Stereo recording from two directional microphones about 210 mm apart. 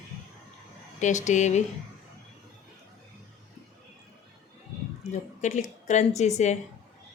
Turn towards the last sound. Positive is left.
turn(degrees=35)  # may be behind; listen again after turning